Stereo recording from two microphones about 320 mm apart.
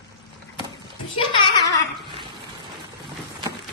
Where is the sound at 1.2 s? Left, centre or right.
Centre.